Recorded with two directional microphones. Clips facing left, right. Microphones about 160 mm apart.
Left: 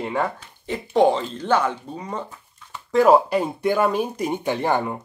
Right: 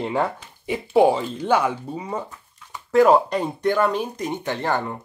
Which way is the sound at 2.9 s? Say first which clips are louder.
Even; 5° left (ahead or behind).